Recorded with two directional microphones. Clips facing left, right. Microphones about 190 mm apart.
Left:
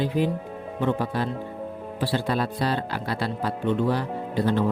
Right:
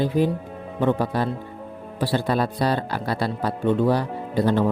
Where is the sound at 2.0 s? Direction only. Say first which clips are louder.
Right 3 dB; 40° right (ahead or behind).